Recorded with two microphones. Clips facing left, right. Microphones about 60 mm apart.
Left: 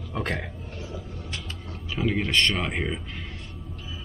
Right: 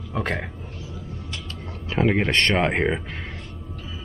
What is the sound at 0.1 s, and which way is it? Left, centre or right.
Speech, centre.